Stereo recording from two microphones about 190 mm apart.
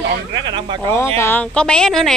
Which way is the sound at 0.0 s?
65° right (ahead or behind).